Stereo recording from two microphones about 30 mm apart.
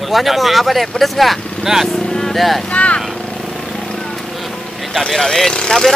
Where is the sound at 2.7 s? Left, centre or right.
Left.